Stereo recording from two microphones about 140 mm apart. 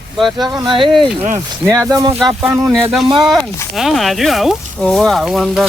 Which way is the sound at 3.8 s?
Centre (ahead or behind).